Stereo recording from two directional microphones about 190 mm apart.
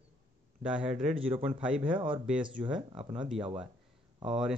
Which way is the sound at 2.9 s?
25° right (ahead or behind).